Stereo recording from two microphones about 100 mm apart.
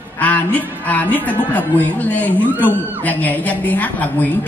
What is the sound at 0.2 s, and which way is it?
A woman's voice, 15° left (ahead or behind).